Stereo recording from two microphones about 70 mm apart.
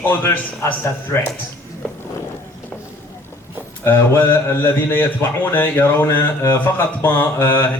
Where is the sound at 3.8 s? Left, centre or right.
Left.